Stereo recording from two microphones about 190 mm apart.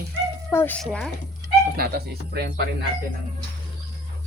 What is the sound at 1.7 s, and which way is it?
Speech, 55° right (ahead or behind).